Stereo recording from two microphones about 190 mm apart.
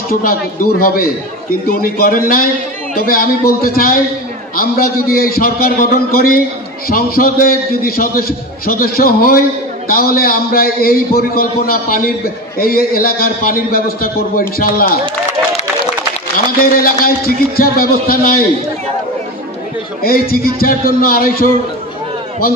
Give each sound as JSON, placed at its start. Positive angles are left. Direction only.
{"t": 0.1, "sound": "a man's voice", "side_deg": 50}
{"t": 16.5, "sound": "a man's voice", "side_deg": 50}
{"t": 20.0, "sound": "a man's voice", "side_deg": 50}